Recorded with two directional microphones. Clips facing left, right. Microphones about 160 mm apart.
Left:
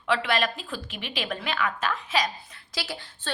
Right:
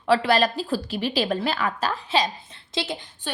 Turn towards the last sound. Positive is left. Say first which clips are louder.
# right 5 dB
turn(degrees=-20)  # may be behind; listen again after turning